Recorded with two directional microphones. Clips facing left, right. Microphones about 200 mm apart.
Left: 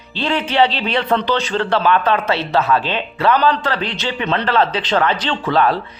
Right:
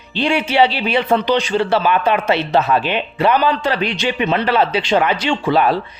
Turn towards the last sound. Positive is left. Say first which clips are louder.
# right 1 dB
turn(degrees=-10)  # may be behind; listen again after turning